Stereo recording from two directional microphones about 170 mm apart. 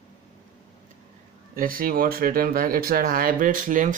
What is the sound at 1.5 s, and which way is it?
Speech, 55° right (ahead or behind).